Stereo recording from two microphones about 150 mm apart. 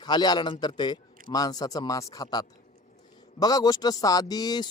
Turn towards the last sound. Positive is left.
turn(degrees=25)  # may be behind; listen again after turning